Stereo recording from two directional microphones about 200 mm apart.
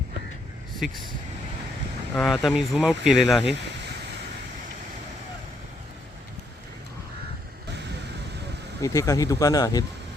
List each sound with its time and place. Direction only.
0.8 s speech: 5° right (ahead or behind)
2.1 s speech: centre (ahead or behind)
3.5 s a sound: 55° right (ahead or behind)
8.8 s speech: 15° left (ahead or behind)